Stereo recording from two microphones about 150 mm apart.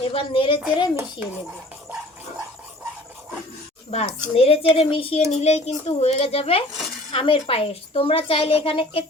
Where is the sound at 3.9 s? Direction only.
40° left (ahead or behind).